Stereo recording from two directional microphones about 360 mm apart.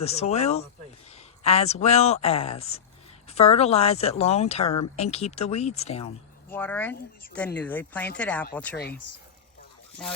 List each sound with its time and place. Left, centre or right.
0.0 s speech: centre
6.5 s speech: centre
10.0 s speech: centre